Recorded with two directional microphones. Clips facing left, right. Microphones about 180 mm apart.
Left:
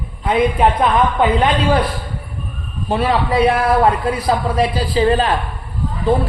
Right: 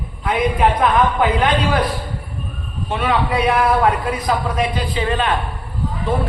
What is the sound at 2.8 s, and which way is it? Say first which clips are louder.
A man's voice: left 2 dB; 35° left (ahead or behind).